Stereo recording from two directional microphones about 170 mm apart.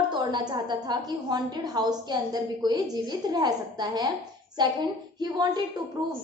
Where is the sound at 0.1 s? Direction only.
25° right (ahead or behind).